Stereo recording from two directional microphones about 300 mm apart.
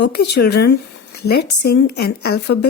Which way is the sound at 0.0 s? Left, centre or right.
Left.